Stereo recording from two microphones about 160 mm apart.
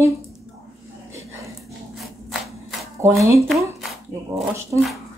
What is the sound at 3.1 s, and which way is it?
Speech, 20° right (ahead or behind).